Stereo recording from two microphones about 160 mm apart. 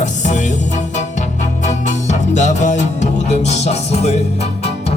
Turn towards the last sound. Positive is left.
turn(degrees=40)  # may be behind; listen again after turning